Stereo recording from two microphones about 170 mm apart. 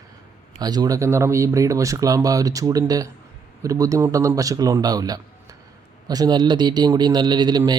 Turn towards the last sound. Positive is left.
turn(degrees=-25)  # may be behind; listen again after turning